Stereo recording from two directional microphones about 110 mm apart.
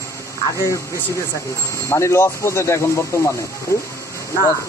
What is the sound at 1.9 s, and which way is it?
Speech, 25° left (ahead or behind).